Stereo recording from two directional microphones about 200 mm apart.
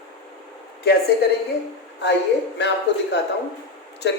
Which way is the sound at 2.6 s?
60° left (ahead or behind).